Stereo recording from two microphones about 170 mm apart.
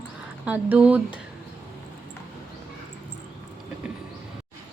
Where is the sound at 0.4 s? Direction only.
10° right (ahead or behind).